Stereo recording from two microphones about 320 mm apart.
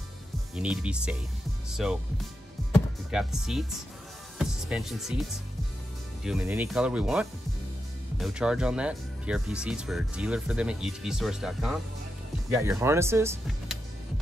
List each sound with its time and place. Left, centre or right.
0.6 s speech: centre
3.1 s speech: centre